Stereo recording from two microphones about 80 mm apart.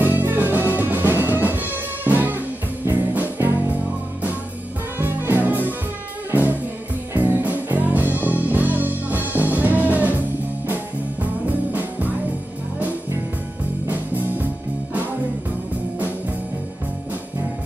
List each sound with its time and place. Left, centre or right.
0.0 s music: right
4.9 s music: right
7.2 s music: right
11.4 s music: centre
13.8 s music: right